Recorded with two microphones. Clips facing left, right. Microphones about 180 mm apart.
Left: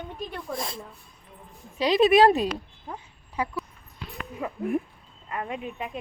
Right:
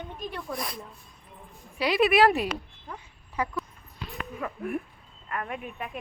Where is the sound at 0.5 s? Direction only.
25° left (ahead or behind).